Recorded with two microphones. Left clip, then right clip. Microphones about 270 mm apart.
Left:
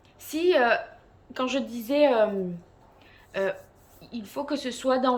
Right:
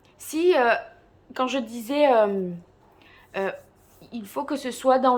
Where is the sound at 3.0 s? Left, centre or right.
Centre.